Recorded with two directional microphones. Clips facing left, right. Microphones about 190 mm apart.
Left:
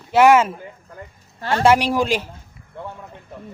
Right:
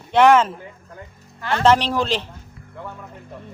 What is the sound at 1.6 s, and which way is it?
Speech, 10° left (ahead or behind).